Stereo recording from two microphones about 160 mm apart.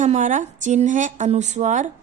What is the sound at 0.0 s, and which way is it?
A woman's voice, 50° right (ahead or behind).